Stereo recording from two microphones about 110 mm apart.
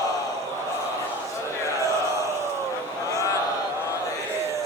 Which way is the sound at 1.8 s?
25° right (ahead or behind).